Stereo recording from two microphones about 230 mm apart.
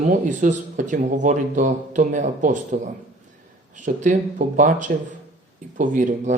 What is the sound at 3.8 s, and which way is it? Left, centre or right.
Speech, right.